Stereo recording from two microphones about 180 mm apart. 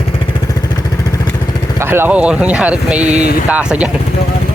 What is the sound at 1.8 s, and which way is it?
Speech, 15° right (ahead or behind).